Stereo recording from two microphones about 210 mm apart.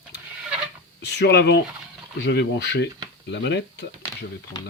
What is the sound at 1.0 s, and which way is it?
Speech, 55° left (ahead or behind).